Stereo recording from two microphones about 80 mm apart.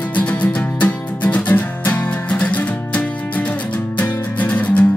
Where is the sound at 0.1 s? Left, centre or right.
Centre.